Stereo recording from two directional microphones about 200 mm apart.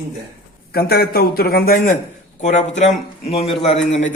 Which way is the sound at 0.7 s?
50° left (ahead or behind).